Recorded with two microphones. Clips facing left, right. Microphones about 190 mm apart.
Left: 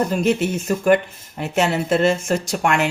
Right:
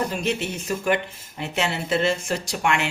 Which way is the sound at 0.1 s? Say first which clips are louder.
Left 7 dB; 45° left (ahead or behind).